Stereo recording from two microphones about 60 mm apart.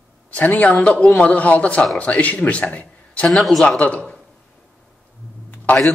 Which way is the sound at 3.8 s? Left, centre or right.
Left.